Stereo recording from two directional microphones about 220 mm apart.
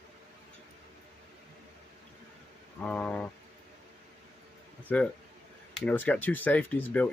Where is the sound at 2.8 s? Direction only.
5° left (ahead or behind).